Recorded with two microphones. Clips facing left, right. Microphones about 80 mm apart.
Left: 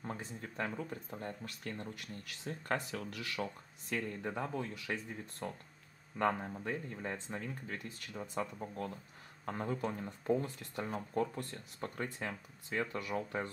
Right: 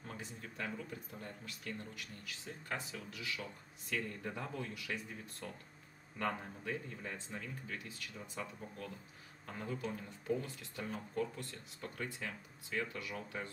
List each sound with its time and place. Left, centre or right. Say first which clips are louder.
0.0 s speech: left 5 dB; left
3.9 s speech: left 3 dB; left